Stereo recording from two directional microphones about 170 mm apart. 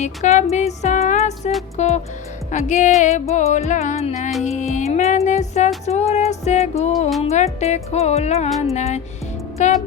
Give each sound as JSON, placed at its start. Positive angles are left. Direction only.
{"t": 0.0, "sound": "music", "side_deg": 40}
{"t": 8.4, "sound": "music", "side_deg": 0}
{"t": 8.7, "sound": "music", "side_deg": 40}